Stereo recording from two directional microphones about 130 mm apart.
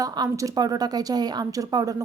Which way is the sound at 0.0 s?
30° right (ahead or behind).